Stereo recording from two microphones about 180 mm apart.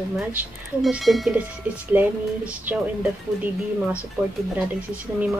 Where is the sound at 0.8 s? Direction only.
Centre (ahead or behind).